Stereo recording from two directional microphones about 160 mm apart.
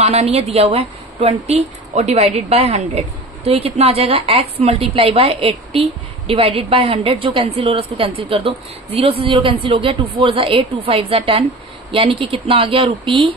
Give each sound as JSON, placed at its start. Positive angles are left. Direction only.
{"t": 0.0, "sound": "a woman's voice", "side_deg": -40}